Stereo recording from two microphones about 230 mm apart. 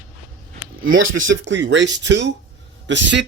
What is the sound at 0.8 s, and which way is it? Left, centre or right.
Speech, right.